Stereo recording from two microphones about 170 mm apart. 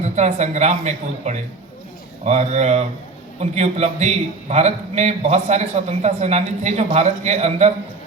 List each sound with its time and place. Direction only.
0.0 s a man's voice: 40° right (ahead or behind)